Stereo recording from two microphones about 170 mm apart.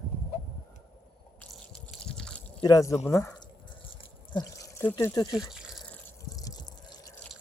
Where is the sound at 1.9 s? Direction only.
5° left (ahead or behind).